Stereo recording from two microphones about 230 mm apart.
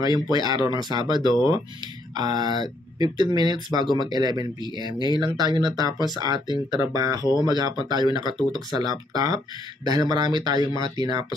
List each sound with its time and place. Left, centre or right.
0.0 s speech: centre
4.9 s speech: centre
5.4 s speech: centre